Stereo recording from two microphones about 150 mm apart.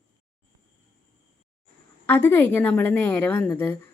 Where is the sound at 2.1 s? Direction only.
15° left (ahead or behind).